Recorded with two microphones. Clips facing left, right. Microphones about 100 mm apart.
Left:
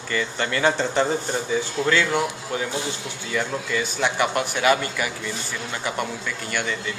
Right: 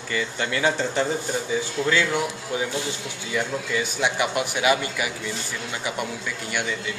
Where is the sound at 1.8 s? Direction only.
25° left (ahead or behind).